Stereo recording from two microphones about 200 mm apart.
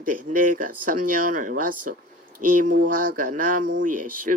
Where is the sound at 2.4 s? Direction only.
40° right (ahead or behind).